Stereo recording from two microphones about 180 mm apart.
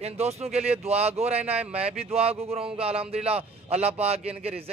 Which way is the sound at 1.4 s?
10° right (ahead or behind).